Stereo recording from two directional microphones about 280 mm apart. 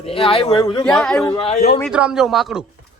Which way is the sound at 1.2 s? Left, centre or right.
Centre.